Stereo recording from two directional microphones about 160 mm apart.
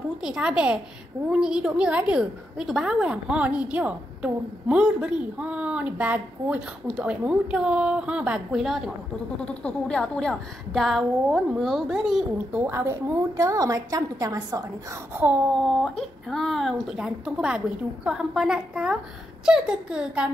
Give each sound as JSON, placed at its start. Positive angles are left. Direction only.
{"t": 0.2, "sound": "a woman's voice", "side_deg": -5}
{"t": 12.6, "sound": "a woman's voice", "side_deg": -15}
{"t": 15.6, "sound": "a woman's voice", "side_deg": 0}